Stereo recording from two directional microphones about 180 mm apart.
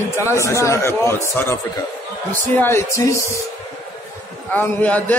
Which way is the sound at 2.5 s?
15° left (ahead or behind).